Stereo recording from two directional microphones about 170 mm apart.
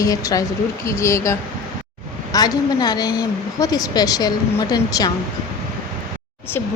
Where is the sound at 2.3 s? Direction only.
20° left (ahead or behind).